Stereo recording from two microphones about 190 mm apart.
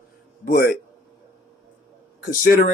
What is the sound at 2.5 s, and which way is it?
Speech, 45° left (ahead or behind).